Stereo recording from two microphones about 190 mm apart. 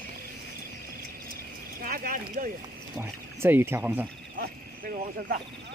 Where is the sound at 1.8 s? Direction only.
50° right (ahead or behind).